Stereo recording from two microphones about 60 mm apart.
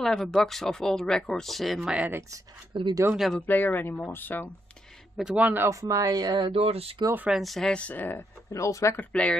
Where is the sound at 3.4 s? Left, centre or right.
Left.